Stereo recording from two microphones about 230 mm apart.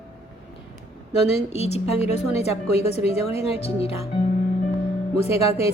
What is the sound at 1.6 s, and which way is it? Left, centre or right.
A woman's voice, left.